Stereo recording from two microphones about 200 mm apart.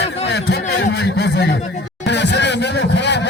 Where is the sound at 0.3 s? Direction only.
55° left (ahead or behind).